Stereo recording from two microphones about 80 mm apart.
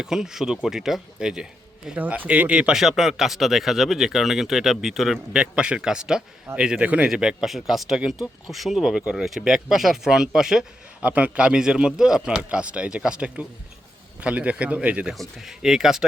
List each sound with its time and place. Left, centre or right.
0.0 s a man's voice: centre
2.0 s a man's voice: right
11.0 s a man's voice: centre
15.1 s speech: centre